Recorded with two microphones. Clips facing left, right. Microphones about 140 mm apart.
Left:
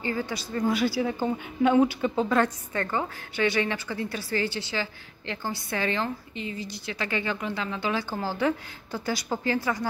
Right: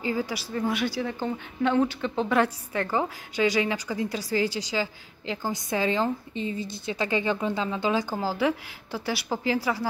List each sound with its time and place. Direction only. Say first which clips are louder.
0.1 s speech: right 1 dB; 10° right (ahead or behind); by 2.2 s 10° left (ahead or behind)
2.2 s speech: even; 5° right (ahead or behind)